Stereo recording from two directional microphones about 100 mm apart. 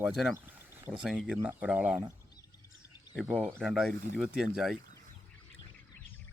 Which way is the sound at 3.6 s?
Centre (ahead or behind).